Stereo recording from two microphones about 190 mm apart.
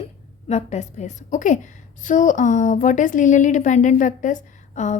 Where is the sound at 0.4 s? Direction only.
35° left (ahead or behind).